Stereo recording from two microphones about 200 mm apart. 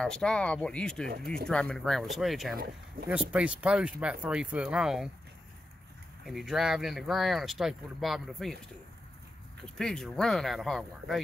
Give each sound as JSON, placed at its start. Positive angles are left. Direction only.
{"t": 0.0, "sound": "speech", "side_deg": 5}
{"t": 2.5, "sound": "speech", "side_deg": -50}
{"t": 3.1, "sound": "speech", "side_deg": -5}
{"t": 6.2, "sound": "speech", "side_deg": 0}
{"t": 9.8, "sound": "speech", "side_deg": 0}